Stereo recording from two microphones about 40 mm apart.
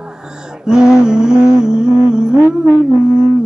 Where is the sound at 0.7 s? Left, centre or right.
Centre.